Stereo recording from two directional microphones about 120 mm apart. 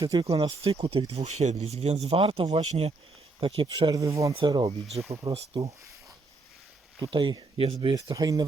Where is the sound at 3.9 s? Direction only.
25° right (ahead or behind).